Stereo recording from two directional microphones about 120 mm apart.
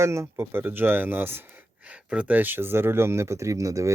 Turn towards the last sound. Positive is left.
turn(degrees=-25)  # may be behind; listen again after turning